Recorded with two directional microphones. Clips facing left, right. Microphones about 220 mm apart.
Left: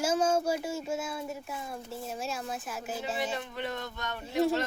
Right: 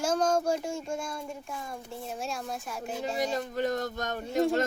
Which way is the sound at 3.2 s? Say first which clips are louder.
Right 5 dB; 40° right (ahead or behind).